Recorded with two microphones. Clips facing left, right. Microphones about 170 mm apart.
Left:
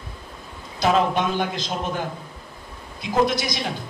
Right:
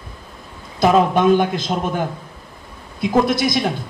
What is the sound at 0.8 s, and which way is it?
A man's voice, 50° right (ahead or behind).